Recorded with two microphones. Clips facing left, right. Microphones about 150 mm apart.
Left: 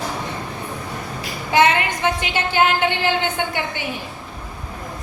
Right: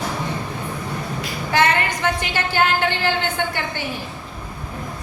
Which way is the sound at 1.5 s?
20° left (ahead or behind).